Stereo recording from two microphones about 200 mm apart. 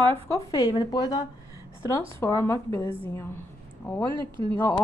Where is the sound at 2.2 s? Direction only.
15° left (ahead or behind).